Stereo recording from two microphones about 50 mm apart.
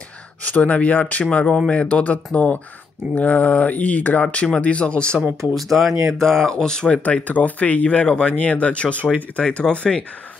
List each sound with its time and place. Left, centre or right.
0.4 s speech: left
5.5 s speech: centre
6.9 s speech: left